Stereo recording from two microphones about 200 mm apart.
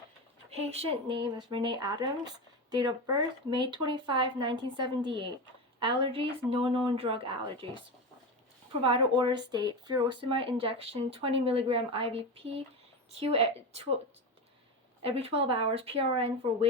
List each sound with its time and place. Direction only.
0.5 s speech: 30° right (ahead or behind)
8.8 s a woman's voice: 25° right (ahead or behind)
15.0 s speech: 30° right (ahead or behind)